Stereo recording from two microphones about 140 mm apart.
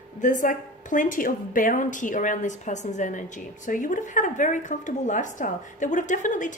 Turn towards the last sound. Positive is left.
turn(degrees=65)  # may be behind; listen again after turning